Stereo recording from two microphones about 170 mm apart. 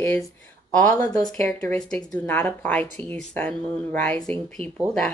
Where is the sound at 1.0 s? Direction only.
20° left (ahead or behind).